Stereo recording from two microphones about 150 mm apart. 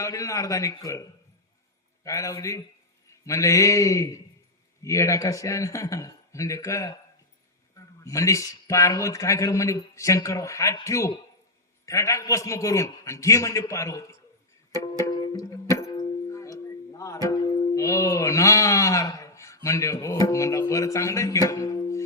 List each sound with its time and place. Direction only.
0.0 s a man's voice: 20° left (ahead or behind)
2.0 s a man's voice: 20° left (ahead or behind)
8.0 s a man's voice: 20° left (ahead or behind)
14.8 s music: 20° left (ahead or behind)